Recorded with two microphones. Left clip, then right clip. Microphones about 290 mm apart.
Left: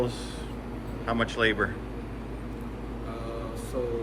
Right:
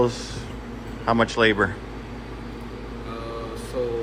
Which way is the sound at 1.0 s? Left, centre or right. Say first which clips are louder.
Right 7 dB; centre.